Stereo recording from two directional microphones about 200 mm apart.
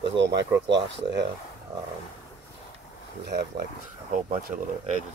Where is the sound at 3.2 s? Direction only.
55° right (ahead or behind).